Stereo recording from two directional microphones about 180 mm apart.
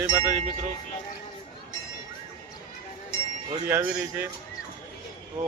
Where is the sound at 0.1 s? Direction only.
25° right (ahead or behind).